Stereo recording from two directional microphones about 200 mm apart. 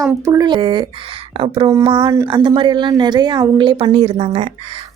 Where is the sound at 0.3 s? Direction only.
20° right (ahead or behind).